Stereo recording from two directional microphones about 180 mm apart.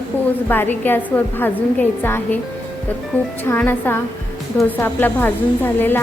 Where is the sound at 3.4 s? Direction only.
10° left (ahead or behind).